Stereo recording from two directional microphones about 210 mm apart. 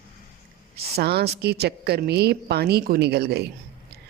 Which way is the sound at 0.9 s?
50° right (ahead or behind).